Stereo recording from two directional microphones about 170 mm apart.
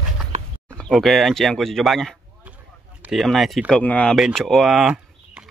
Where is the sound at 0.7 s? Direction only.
Centre (ahead or behind).